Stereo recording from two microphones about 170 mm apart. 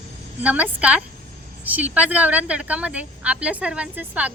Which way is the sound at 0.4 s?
10° right (ahead or behind).